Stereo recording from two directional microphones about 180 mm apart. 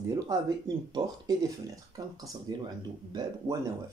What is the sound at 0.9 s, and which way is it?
Speech, 20° right (ahead or behind).